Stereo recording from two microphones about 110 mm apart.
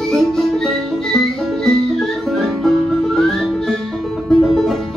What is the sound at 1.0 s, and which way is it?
Music, 5° left (ahead or behind).